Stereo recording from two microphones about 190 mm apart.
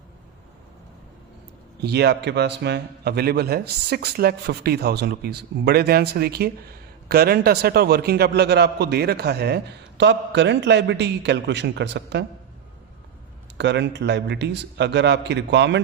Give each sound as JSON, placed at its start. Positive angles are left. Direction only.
{"t": 1.8, "sound": "a man's voice", "side_deg": -60}
{"t": 13.6, "sound": "a man's voice", "side_deg": -65}